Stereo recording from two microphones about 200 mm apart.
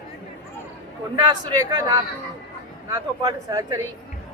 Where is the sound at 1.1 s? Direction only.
20° right (ahead or behind).